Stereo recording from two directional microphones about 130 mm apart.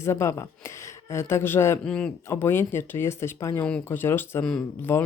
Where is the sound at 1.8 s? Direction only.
5° left (ahead or behind).